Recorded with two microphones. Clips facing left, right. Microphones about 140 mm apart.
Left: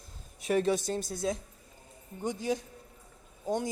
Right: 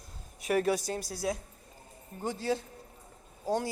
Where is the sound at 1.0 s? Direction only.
25° left (ahead or behind).